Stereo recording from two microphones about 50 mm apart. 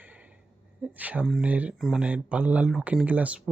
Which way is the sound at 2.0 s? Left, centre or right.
Right.